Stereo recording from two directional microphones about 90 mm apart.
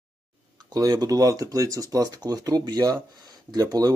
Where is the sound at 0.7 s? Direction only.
45° right (ahead or behind).